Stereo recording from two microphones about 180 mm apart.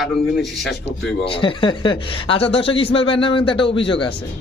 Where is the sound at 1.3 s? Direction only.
30° left (ahead or behind).